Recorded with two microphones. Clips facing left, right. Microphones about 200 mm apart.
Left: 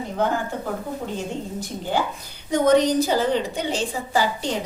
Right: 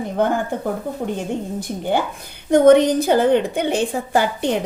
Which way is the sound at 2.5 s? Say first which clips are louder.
Right 6 dB; 55° right (ahead or behind).